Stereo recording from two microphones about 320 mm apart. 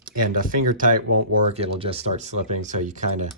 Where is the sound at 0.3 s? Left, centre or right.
Right.